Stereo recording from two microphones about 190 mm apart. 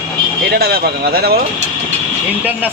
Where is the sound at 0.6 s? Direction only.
55° right (ahead or behind).